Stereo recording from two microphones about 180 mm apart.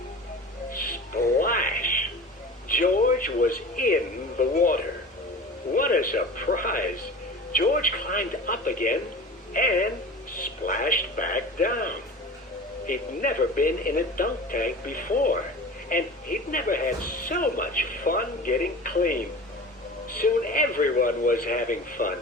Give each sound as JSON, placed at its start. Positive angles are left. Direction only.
{"t": 0.7, "sound": "music", "side_deg": 50}
{"t": 2.6, "sound": "a sound", "side_deg": 50}
{"t": 4.4, "sound": "speech", "side_deg": 50}